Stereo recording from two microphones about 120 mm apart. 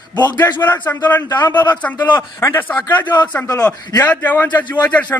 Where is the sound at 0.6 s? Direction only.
15° left (ahead or behind).